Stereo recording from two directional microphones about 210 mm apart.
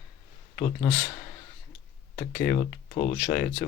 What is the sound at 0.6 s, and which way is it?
Speech, 25° left (ahead or behind).